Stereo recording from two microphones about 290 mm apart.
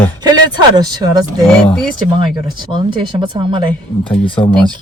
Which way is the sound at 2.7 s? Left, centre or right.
Centre.